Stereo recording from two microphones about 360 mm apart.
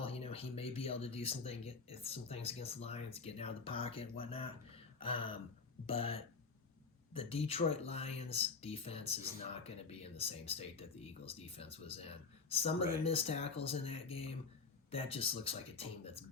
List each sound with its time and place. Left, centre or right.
0.0 s speech: centre